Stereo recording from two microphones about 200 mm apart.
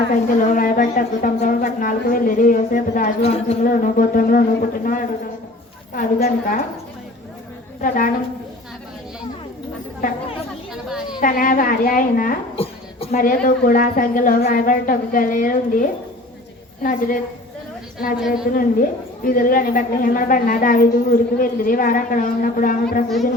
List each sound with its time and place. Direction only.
0.3 s a woman's voice: 40° left (ahead or behind)
3.6 s a woman's voice: 40° left (ahead or behind)
7.8 s a woman's voice: 45° left (ahead or behind)
11.2 s a woman's voice: 45° left (ahead or behind)
12.5 s a sound: 30° left (ahead or behind)
13.1 s a woman's voice: 45° left (ahead or behind)
18.5 s a woman's voice: 45° left (ahead or behind)